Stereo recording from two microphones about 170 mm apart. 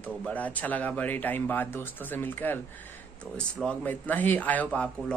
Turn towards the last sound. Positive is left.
turn(degrees=5)  # may be behind; listen again after turning